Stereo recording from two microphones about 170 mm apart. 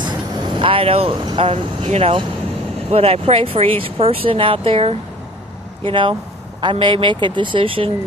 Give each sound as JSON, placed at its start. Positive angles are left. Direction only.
{"t": 0.5, "sound": "speech", "side_deg": -30}